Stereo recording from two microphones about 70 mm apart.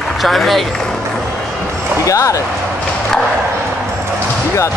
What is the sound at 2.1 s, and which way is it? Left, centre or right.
Speech, left.